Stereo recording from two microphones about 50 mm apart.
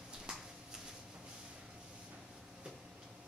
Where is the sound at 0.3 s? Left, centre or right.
Centre.